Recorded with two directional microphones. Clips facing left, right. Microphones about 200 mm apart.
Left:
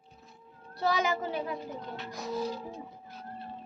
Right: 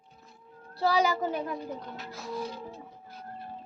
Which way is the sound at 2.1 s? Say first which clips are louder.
Left 2 dB; 20° left (ahead or behind).